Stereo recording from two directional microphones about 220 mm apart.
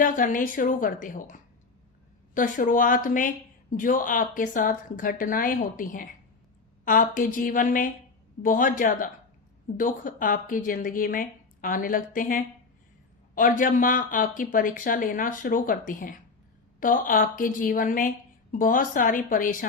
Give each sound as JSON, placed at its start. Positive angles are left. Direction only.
{"t": 0.0, "sound": "a woman's voice", "side_deg": 40}